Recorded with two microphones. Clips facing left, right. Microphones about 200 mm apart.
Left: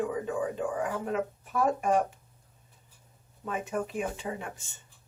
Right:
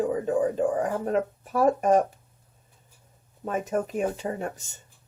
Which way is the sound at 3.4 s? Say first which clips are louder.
Right 5 dB; 40° right (ahead or behind).